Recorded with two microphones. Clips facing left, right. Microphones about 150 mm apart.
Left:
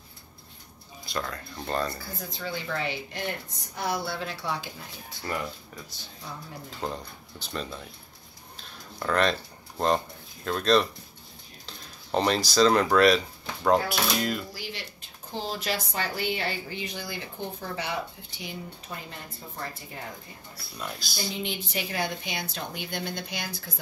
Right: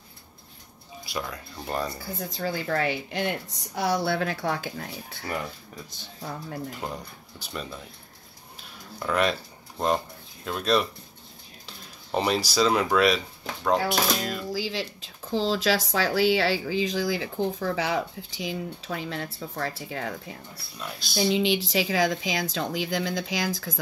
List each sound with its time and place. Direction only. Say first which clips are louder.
1.0 s speech: even; 10° right (ahead or behind)
2.3 s speech: right 5 dB; 45° right (ahead or behind)
3.7 s speech: right 5 dB; 70° right (ahead or behind)
6.8 s speech: left 1 dB; 10° right (ahead or behind)
8.5 s a sound: right 1 dB; 5° right (ahead or behind)
12.4 s speech: left 2 dB; 5° right (ahead or behind)
14.5 s speech: right 9 dB; 90° right
20.8 s speech: right 7 dB; centre (ahead or behind)
21.3 s speech: right 10 dB; 90° right